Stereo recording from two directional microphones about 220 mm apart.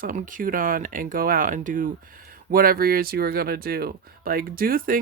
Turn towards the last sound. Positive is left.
turn(degrees=-40)  # may be behind; listen again after turning